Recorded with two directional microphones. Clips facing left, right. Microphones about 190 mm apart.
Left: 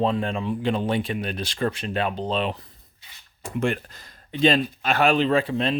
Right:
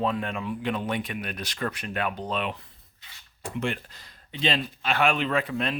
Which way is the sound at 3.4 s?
45° left (ahead or behind).